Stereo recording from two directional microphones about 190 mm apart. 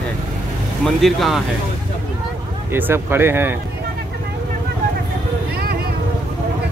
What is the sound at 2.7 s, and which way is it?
Speech, 10° right (ahead or behind).